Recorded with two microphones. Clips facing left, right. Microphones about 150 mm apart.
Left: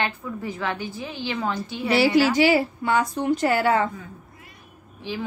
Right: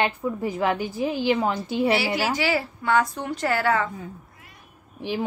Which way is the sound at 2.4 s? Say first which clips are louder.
Left 6 dB; 15° left (ahead or behind).